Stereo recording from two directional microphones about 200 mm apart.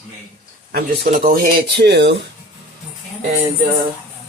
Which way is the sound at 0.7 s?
45° right (ahead or behind).